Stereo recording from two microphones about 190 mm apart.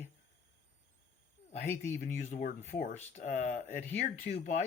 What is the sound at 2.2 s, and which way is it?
Speech, 40° left (ahead or behind).